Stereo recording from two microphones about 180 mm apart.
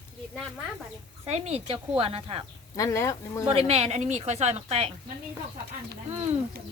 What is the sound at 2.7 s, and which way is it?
Speech, 20° left (ahead or behind).